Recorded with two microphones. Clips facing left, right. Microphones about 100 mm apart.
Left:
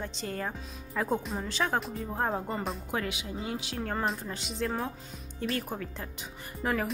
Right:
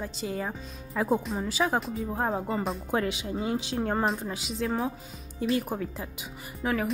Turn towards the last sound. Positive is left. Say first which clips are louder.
# right 2 dB
turn(degrees=0)  # may be behind; listen again after turning